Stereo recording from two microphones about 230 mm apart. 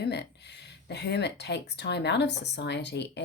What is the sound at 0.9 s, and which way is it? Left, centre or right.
Speech, left.